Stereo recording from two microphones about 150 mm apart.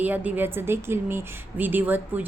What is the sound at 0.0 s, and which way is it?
A woman's voice, 10° right (ahead or behind).